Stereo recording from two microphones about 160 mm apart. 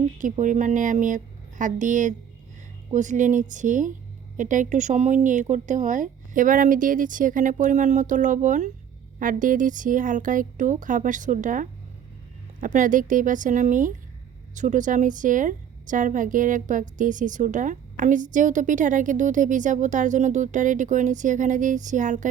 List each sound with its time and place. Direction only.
0.2 s a woman's voice: 55° right (ahead or behind)